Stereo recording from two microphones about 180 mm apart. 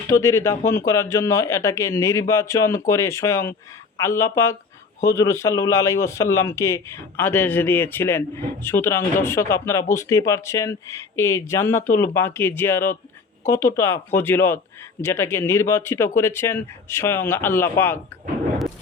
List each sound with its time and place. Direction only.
0.1 s speech: 15° left (ahead or behind)